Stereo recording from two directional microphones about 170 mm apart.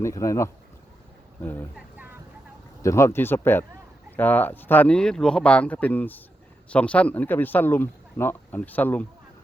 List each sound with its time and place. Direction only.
0.0 s speech: 20° left (ahead or behind)
2.8 s speech: 15° left (ahead or behind)